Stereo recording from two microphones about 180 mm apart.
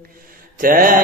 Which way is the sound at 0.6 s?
50° right (ahead or behind).